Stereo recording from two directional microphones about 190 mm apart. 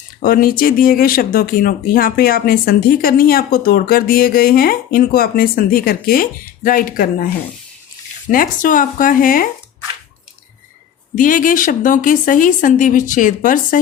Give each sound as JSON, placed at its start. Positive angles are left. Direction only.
{"t": 0.2, "sound": "speech", "side_deg": 50}
{"t": 8.3, "sound": "speech", "side_deg": 45}
{"t": 11.1, "sound": "speech", "side_deg": 45}